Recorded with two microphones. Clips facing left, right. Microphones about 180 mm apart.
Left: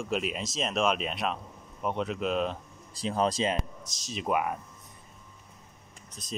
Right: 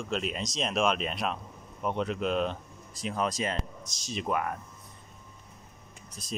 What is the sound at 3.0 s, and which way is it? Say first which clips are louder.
Speech: left 3 dB; 30° left (ahead or behind).